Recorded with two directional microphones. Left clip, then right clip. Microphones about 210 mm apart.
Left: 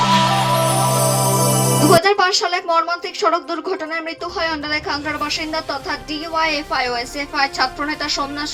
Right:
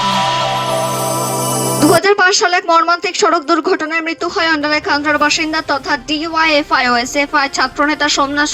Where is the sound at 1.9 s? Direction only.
35° right (ahead or behind).